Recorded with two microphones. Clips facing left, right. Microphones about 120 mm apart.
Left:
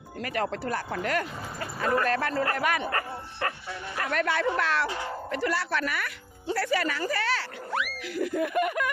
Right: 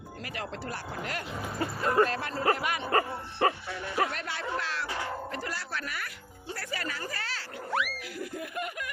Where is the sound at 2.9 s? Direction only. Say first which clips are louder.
Right 4 dB; 25° right (ahead or behind).